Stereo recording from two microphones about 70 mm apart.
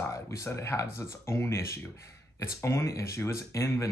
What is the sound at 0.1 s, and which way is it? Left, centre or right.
Speech, left.